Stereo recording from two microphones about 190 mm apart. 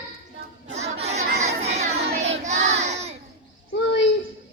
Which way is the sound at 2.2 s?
35° right (ahead or behind).